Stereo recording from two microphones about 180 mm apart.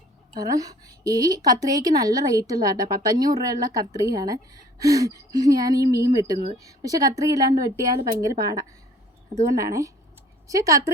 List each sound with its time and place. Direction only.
0.3 s a woman's voice: 20° right (ahead or behind)